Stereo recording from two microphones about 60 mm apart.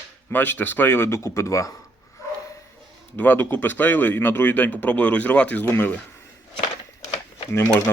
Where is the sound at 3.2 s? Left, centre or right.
Left.